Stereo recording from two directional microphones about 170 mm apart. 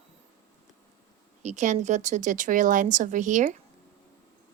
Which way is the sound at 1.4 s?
45° right (ahead or behind).